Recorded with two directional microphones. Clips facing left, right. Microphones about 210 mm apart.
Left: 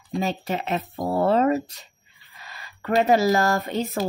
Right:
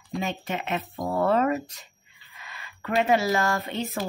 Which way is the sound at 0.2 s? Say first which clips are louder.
Left 4 dB; 35° left (ahead or behind).